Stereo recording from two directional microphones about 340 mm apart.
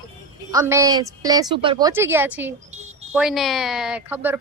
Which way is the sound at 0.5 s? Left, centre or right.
Centre.